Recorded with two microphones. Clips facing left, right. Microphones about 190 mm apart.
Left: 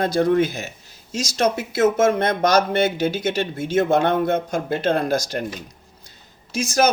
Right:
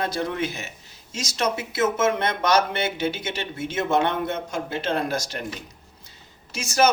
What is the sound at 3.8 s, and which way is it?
A man's voice, 35° left (ahead or behind).